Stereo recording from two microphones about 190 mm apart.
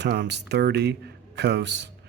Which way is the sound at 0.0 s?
65° right (ahead or behind).